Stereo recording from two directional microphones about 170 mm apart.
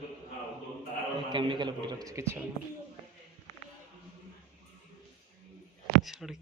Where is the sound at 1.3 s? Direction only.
30° right (ahead or behind).